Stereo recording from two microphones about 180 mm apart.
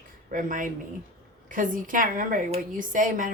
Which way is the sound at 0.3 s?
45° right (ahead or behind).